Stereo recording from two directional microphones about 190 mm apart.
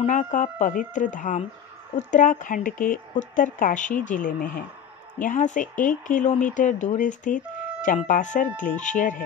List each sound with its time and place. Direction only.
0.0 s speech: 40° left (ahead or behind)